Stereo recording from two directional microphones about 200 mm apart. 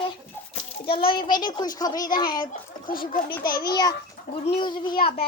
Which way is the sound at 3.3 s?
50° left (ahead or behind).